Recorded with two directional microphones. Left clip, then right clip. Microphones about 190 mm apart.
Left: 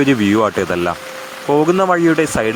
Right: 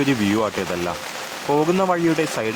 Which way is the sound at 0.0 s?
20° left (ahead or behind).